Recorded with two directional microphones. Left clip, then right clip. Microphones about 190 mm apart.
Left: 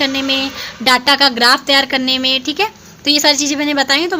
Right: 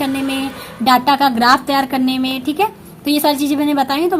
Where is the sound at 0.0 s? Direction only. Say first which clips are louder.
Left 4 dB; 30° left (ahead or behind).